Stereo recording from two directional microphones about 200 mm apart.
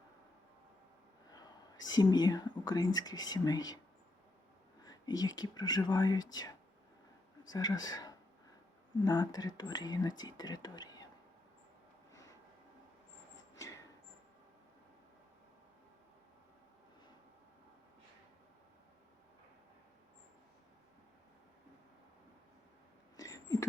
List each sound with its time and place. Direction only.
1.3 s speech: 20° left (ahead or behind)
4.8 s whispering: 20° left (ahead or behind)
5.4 s speech: 20° left (ahead or behind)
7.4 s speech: 20° left (ahead or behind)
23.1 s a sound: 15° left (ahead or behind)